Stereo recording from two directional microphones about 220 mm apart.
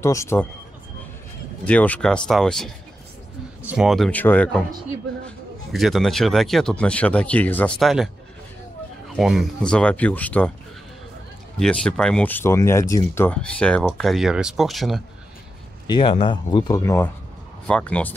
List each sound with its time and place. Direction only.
0.0 s speech: 15° left (ahead or behind)
1.7 s speech: 5° left (ahead or behind)
5.7 s speech: centre (ahead or behind)
9.1 s speech: centre (ahead or behind)
11.6 s speech: 5° left (ahead or behind)
15.9 s speech: 25° left (ahead or behind); by 18.1 s 5° left (ahead or behind)